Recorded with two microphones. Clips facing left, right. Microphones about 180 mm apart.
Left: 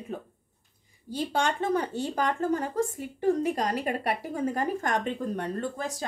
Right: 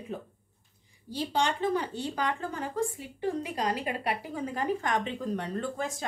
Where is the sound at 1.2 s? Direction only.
50° left (ahead or behind).